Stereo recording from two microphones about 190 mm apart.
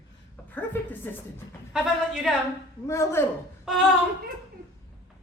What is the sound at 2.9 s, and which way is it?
Speech, 15° left (ahead or behind).